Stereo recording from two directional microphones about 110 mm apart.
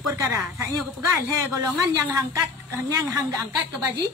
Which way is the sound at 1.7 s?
30° right (ahead or behind).